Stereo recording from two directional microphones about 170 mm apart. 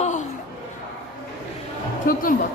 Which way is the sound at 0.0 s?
45° left (ahead or behind).